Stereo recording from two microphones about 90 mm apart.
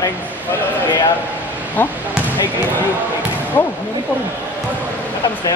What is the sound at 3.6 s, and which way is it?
Speech, 50° left (ahead or behind).